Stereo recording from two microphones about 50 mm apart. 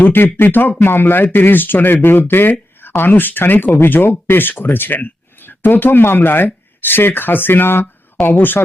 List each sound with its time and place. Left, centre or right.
0.0 s speech: left